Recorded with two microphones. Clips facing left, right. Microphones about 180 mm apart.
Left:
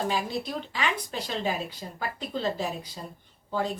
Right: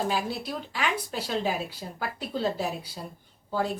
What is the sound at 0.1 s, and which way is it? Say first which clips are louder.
A woman's voice: even; 5° right (ahead or behind).